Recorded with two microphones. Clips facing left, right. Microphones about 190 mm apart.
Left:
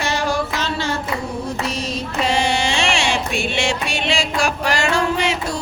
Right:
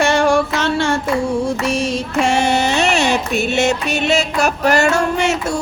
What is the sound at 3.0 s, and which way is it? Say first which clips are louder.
Music: right 4 dB; 40° right (ahead or behind).